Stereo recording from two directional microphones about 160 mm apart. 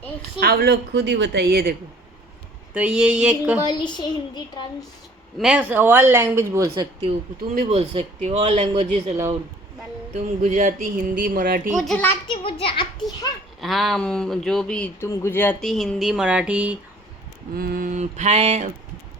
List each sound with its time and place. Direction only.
0.3 s a woman's voice: 70° right (ahead or behind)
2.7 s speech: 5° right (ahead or behind)
3.7 s a child's voice: 25° left (ahead or behind)
5.4 s a woman's voice: 5° right (ahead or behind)
7.6 s a man's voice: 40° right (ahead or behind)
10.2 s mantra: 45° right (ahead or behind)
11.2 s speech: 70° right (ahead or behind)
11.7 s speech: centre (ahead or behind)
12.3 s a child's voice: 35° left (ahead or behind)
13.6 s speech: centre (ahead or behind)
15.0 s speech: 15° left (ahead or behind)
15.6 s speech: centre (ahead or behind)
17.5 s mantra: 70° right (ahead or behind); by 18.7 s 45° right (ahead or behind)